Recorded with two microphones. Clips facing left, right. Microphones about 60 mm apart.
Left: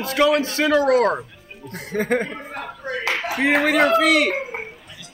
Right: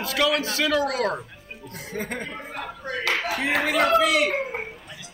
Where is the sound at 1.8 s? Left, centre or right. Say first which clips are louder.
Left 10 dB; left.